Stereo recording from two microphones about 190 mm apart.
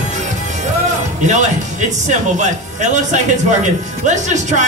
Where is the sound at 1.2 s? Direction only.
40° right (ahead or behind).